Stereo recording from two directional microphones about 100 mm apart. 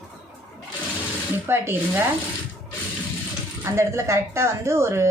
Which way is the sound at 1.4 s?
25° right (ahead or behind).